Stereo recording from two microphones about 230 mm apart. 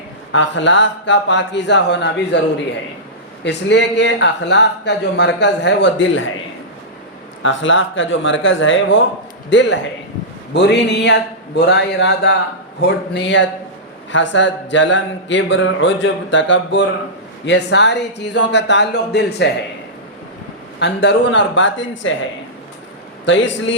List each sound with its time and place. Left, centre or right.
0.3 s speech: left
3.4 s speech: left
7.4 s speech: left
20.7 s speech: left
23.2 s speech: left